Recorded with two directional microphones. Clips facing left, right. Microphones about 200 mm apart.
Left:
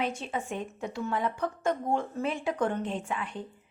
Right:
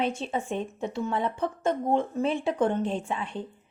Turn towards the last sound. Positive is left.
turn(degrees=-25)  # may be behind; listen again after turning